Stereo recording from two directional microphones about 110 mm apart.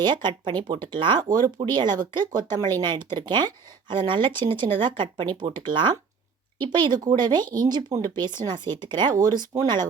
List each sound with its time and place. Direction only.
0.0 s speech: 45° right (ahead or behind)